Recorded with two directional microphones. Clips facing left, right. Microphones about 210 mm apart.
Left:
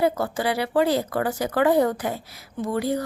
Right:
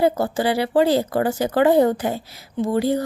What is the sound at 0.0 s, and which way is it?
Speech, 30° right (ahead or behind).